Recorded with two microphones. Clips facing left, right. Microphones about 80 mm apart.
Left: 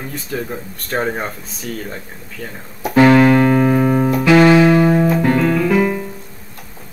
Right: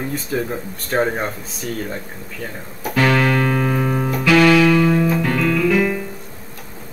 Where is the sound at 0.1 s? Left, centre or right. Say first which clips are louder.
Right 2 dB; centre.